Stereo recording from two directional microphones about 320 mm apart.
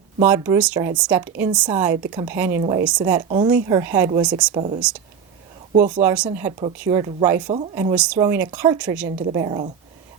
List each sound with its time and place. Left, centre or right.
0.2 s speech: centre
5.8 s speech: centre